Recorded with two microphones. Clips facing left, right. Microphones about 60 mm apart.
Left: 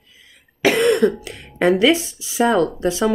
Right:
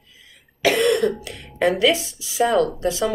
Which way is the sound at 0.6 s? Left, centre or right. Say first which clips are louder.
Left 3 dB; left.